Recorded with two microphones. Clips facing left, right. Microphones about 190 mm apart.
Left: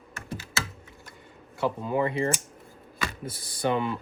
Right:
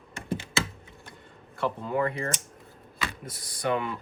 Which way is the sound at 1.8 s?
15° left (ahead or behind).